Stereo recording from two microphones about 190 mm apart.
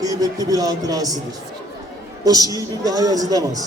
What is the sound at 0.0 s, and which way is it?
A man's voice, 20° right (ahead or behind).